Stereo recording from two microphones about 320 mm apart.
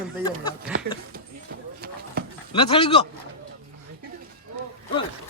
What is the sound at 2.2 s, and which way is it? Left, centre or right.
Dog, right.